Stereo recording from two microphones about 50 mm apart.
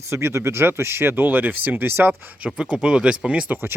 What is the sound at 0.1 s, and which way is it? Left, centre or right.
Speech, right.